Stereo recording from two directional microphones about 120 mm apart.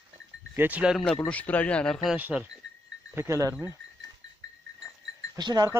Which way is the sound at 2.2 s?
10° right (ahead or behind).